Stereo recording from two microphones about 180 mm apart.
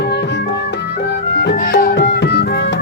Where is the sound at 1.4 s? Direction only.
65° left (ahead or behind).